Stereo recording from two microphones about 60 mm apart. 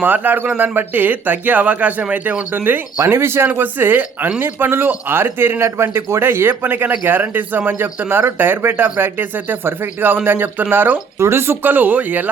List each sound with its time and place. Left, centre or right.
0.0 s speech: right
3.1 s speech: right
11.2 s speech: right